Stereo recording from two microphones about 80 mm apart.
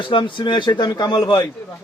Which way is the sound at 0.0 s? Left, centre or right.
Left.